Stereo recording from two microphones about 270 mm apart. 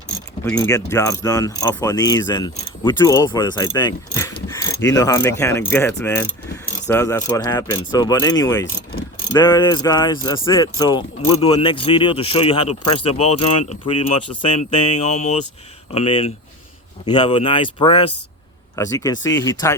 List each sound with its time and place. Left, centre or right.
0.4 s mechanisms: centre
9.3 s speech: centre
13.2 s speech: left
13.7 s speech: left
18.8 s mechanisms: centre